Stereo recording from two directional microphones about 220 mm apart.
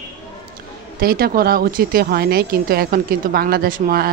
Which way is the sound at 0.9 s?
45° right (ahead or behind).